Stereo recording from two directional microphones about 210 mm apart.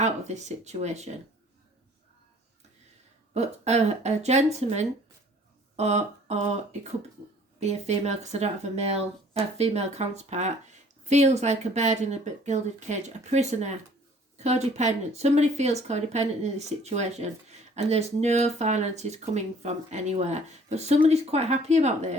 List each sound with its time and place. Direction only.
0.0 s speech: 35° right (ahead or behind)
3.3 s speech: 30° right (ahead or behind)